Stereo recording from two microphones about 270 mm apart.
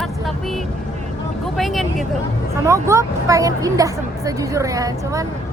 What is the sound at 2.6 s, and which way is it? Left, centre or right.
Speech, centre.